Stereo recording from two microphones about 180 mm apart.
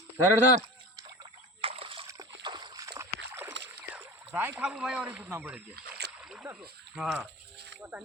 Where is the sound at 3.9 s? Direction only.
10° right (ahead or behind).